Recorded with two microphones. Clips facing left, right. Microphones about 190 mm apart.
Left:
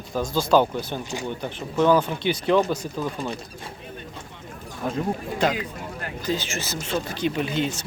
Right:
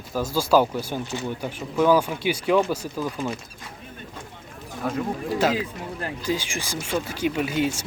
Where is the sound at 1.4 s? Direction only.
10° right (ahead or behind).